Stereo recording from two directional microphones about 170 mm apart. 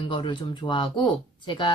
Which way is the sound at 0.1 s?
30° left (ahead or behind).